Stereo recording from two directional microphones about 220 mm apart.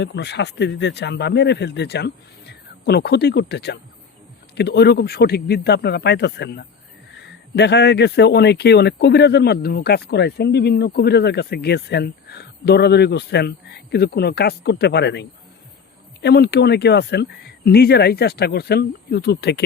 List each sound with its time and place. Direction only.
0.0 s speech: 50° left (ahead or behind)